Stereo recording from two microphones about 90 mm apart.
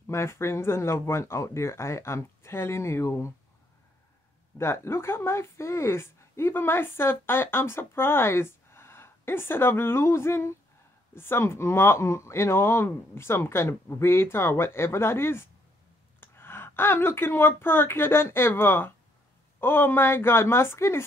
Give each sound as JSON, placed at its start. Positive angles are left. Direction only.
{"t": 0.0, "sound": "speech", "side_deg": 30}
{"t": 4.6, "sound": "speech", "side_deg": 30}